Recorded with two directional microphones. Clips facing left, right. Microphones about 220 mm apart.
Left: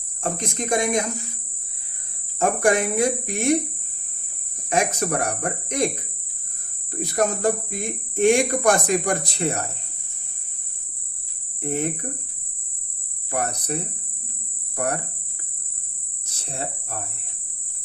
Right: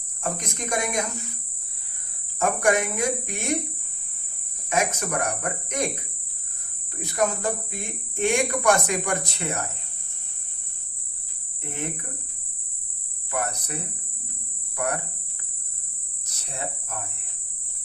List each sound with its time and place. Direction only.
0.2 s speech: 30° left (ahead or behind)
2.4 s speech: 30° left (ahead or behind)
4.7 s speech: 35° left (ahead or behind)
6.9 s speech: 35° left (ahead or behind)
11.6 s speech: 35° left (ahead or behind)
13.3 s speech: 35° left (ahead or behind)
14.8 s speech: 35° left (ahead or behind)
16.2 s cricket: 30° left (ahead or behind)